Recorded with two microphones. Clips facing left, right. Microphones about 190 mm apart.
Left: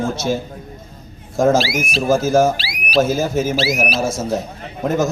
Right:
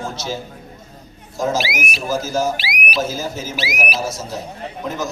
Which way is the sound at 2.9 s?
55° left (ahead or behind).